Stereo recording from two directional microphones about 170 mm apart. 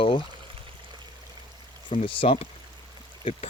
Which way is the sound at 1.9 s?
35° left (ahead or behind).